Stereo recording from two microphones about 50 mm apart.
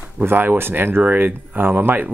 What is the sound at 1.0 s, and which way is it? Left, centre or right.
Speech, right.